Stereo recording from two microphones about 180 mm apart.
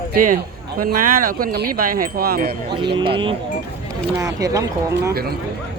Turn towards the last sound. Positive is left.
turn(degrees=-60)  # may be behind; listen again after turning